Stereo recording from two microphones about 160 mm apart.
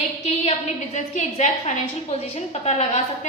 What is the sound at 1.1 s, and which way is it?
A woman's voice, 45° left (ahead or behind).